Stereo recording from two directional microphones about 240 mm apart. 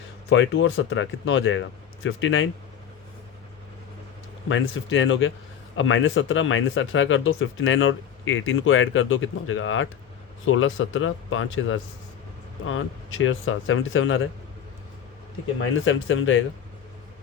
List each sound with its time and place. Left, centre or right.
0.3 s speech: left
4.4 s speech: left
15.7 s speech: left